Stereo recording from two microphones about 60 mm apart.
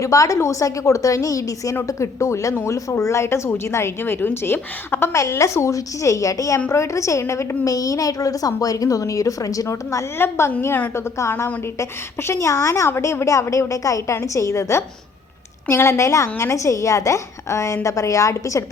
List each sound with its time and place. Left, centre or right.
0.0 s a woman's voice: left
1.9 s speech: left
5.3 s a woman's voice: left
6.7 s a woman's voice: left
10.2 s a woman's voice: left